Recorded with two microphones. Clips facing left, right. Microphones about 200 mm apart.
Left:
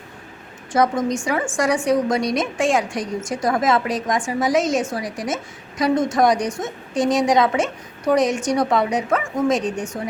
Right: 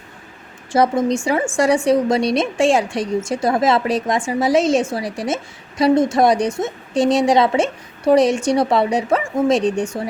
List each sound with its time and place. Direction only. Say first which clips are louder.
0.7 s a woman's voice: right 3 dB; 30° right (ahead or behind)